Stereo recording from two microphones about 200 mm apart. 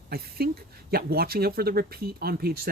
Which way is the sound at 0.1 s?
50° right (ahead or behind).